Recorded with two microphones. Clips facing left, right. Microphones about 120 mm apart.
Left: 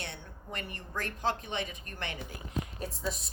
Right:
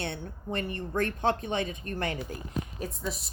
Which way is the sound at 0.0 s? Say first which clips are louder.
Right 8 dB; 35° right (ahead or behind).